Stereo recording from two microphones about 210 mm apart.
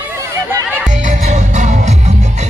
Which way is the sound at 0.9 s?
35° right (ahead or behind).